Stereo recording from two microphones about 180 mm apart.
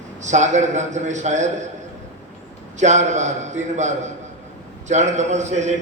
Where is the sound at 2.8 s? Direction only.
40° right (ahead or behind).